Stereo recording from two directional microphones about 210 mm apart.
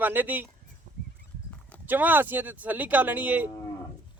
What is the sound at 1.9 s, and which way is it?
Speech, 10° right (ahead or behind).